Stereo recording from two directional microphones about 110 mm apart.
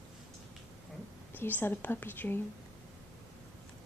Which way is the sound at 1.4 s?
15° left (ahead or behind).